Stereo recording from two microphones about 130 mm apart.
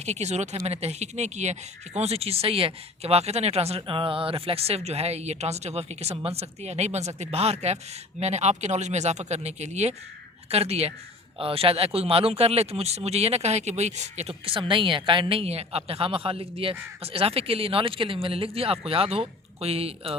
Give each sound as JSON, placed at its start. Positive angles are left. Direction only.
{"t": 0.0, "sound": "speech", "side_deg": -60}